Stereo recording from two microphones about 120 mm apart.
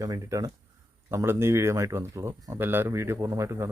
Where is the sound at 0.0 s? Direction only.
25° right (ahead or behind).